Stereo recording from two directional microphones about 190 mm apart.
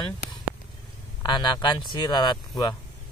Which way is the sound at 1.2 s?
25° left (ahead or behind).